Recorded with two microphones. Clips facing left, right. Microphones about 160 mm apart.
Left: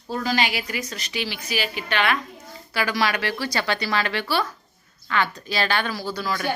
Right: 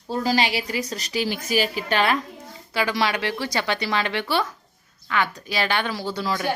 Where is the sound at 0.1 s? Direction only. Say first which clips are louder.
Right 2 dB; 30° right (ahead or behind).